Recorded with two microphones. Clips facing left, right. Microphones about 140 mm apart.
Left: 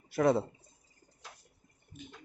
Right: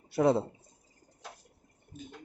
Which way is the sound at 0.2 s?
25° right (ahead or behind).